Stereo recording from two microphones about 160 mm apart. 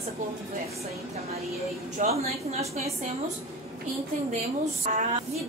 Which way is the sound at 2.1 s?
40° right (ahead or behind).